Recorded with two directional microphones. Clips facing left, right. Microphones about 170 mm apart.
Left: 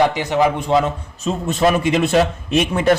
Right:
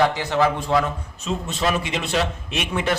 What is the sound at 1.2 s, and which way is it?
A man's voice, 50° left (ahead or behind).